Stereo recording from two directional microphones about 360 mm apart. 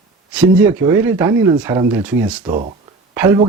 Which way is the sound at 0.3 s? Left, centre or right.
Centre.